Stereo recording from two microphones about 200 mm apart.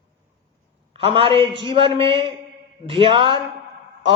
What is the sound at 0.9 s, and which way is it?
A man's voice, 30° right (ahead or behind).